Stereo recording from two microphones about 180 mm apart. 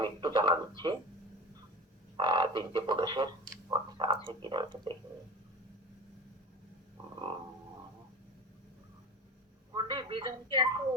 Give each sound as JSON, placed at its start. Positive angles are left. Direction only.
{"t": 0.0, "sound": "speech", "side_deg": -25}
{"t": 2.1, "sound": "speech", "side_deg": -25}
{"t": 9.7, "sound": "speech", "side_deg": -25}